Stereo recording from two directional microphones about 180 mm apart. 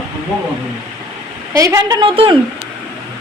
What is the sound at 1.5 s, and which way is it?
Speech, 20° right (ahead or behind).